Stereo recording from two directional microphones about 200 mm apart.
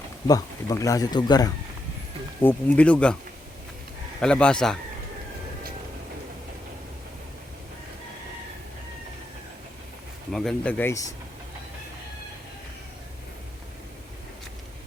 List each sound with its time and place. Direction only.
0.3 s speech: 15° left (ahead or behind)
2.4 s speech: 10° left (ahead or behind)
4.2 s speech: 5° left (ahead or behind)
10.3 s speech: 5° left (ahead or behind)